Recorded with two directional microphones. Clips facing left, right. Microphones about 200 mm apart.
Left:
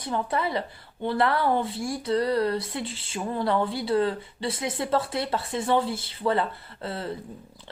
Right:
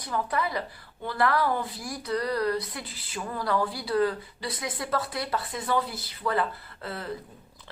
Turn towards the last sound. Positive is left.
turn(degrees=30)  # may be behind; listen again after turning